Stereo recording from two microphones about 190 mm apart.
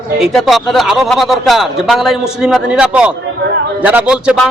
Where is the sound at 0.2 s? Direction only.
Centre (ahead or behind).